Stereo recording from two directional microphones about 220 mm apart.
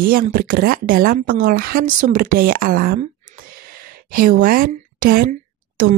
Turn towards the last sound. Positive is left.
turn(degrees=-40)  # may be behind; listen again after turning